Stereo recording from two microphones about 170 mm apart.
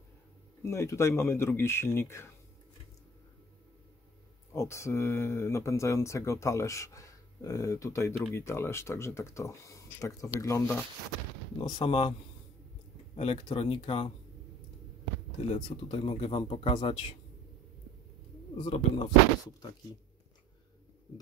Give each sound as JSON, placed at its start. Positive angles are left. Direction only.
{"t": 0.7, "sound": "speech", "side_deg": 15}
{"t": 4.6, "sound": "speech", "side_deg": 15}
{"t": 11.5, "sound": "speech", "side_deg": 30}
{"t": 13.1, "sound": "speech", "side_deg": 35}
{"t": 15.5, "sound": "speech", "side_deg": 30}
{"t": 18.7, "sound": "speech", "side_deg": 25}